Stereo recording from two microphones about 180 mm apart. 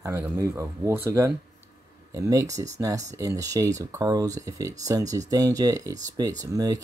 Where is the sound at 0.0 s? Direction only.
15° right (ahead or behind).